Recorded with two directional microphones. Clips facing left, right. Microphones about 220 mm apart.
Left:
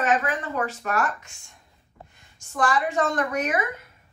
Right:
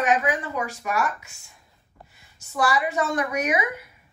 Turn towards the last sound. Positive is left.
turn(degrees=-10)  # may be behind; listen again after turning